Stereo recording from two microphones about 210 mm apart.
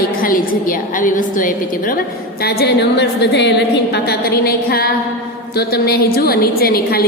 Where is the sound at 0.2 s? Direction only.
40° left (ahead or behind).